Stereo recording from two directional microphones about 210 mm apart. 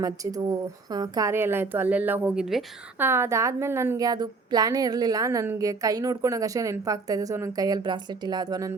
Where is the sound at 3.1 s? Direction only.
15° right (ahead or behind).